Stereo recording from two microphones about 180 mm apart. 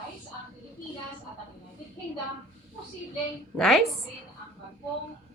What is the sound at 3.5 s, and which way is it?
Speech, centre (ahead or behind).